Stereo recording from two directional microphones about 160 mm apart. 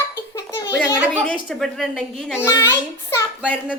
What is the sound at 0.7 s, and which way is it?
A child's voice, 15° left (ahead or behind).